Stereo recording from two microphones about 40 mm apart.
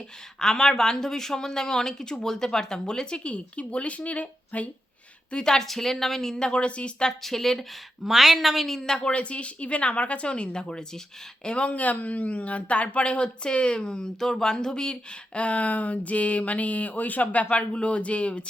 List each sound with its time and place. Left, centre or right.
0.3 s speech: centre; by 4.7 s left
5.3 s speech: centre
5.6 s speech: centre; by 7.1 s left
7.1 s speech: centre
8.0 s a woman's voice: centre
8.8 s a woman's voice: left
11.7 s speech: left
14.2 s speech: centre; by 17.4 s left
17.5 s speech: left